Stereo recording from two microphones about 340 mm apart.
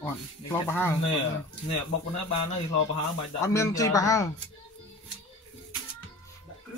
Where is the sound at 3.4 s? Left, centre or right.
Centre.